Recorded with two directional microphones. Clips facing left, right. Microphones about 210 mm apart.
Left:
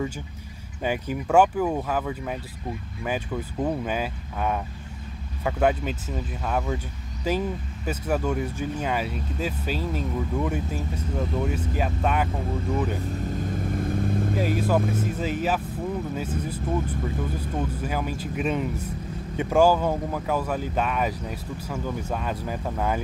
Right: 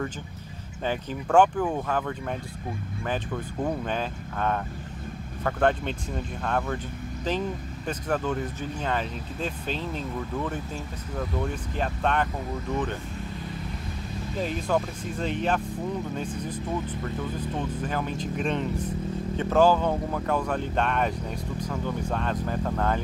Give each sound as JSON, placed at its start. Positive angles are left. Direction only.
{"t": 0.8, "sound": "speech", "side_deg": 10}
{"t": 13.3, "sound": "vehicle", "side_deg": 45}
{"t": 14.4, "sound": "speech", "side_deg": 5}